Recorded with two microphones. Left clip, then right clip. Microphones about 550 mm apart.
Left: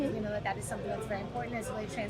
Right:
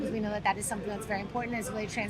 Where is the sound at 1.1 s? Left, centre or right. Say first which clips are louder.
Right 3 dB; right.